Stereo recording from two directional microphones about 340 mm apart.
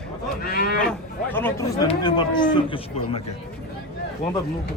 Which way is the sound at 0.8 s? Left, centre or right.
Centre.